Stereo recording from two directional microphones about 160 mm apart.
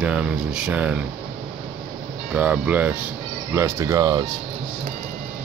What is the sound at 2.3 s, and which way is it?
Speech, 10° right (ahead or behind).